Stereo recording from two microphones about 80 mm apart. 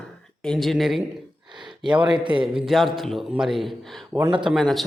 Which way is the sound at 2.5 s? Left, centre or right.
Centre.